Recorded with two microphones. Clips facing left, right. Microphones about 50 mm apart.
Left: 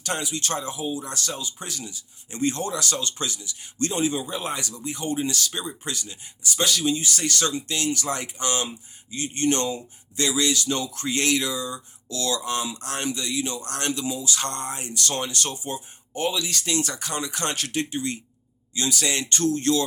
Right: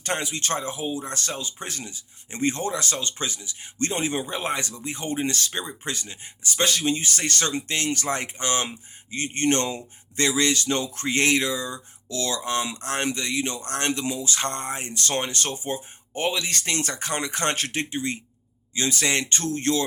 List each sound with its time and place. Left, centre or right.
0.0 s speech: right